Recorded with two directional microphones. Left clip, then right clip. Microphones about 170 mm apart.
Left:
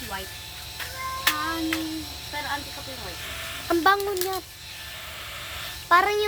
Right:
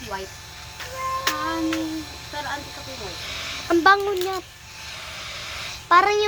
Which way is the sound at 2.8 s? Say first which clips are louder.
Right 2 dB; centre (ahead or behind).